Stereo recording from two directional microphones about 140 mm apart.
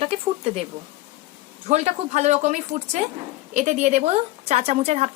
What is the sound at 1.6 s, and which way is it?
Speech, 55° right (ahead or behind).